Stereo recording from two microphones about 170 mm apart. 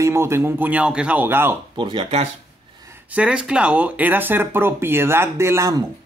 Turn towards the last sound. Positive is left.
turn(degrees=-15)  # may be behind; listen again after turning